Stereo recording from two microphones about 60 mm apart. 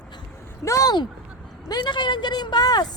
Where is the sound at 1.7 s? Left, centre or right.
Left.